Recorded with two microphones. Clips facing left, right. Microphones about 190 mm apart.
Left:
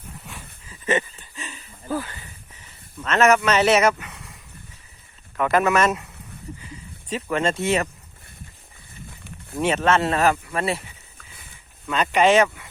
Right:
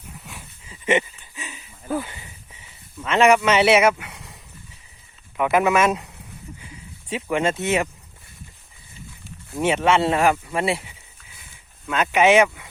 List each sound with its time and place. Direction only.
0.7 s a sound: 20° right (ahead or behind)
3.0 s speech: 10° right (ahead or behind)
5.4 s speech: 10° right (ahead or behind)
7.1 s speech: 10° right (ahead or behind)
9.0 s livestock: 55° left (ahead or behind)
9.6 s speech: 10° right (ahead or behind)
11.9 s speech: 5° right (ahead or behind)